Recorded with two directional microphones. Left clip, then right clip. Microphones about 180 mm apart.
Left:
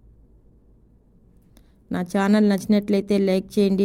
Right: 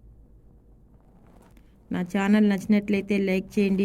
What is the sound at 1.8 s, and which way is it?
A woman's voice, 15° left (ahead or behind).